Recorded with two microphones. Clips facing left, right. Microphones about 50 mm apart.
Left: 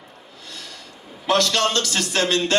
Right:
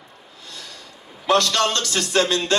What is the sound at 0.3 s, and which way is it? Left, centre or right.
Snort, left.